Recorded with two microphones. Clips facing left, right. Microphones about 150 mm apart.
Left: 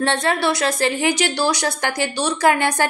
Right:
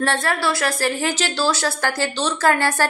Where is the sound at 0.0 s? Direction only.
20° left (ahead or behind).